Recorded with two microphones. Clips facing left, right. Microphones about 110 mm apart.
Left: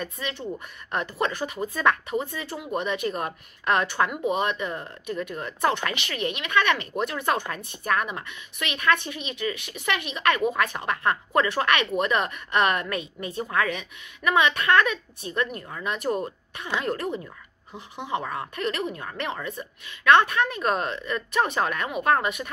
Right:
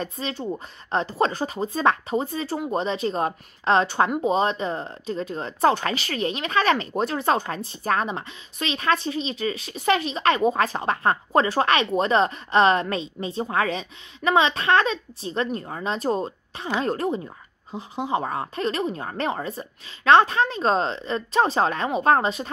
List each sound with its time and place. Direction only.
0.0 s speech: 30° right (ahead or behind)